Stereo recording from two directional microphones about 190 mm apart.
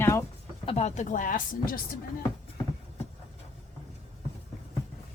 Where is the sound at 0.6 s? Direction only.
35° left (ahead or behind).